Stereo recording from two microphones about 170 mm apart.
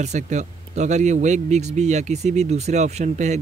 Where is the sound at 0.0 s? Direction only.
45° right (ahead or behind).